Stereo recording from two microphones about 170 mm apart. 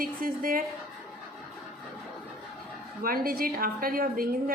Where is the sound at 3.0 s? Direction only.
60° right (ahead or behind).